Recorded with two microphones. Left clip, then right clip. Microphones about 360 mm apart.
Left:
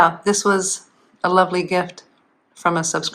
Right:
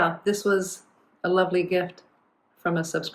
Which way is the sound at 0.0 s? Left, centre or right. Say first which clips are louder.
Left 8 dB; centre.